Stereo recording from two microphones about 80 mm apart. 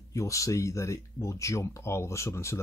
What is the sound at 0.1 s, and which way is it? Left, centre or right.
Speech, left.